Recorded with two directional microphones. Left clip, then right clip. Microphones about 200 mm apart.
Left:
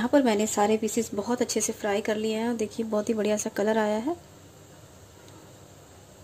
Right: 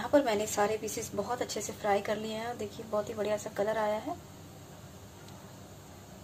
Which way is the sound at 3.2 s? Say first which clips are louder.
Left 5 dB; 45° left (ahead or behind).